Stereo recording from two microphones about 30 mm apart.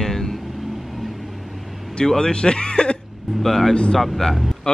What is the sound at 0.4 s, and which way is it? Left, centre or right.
Vehicle, centre.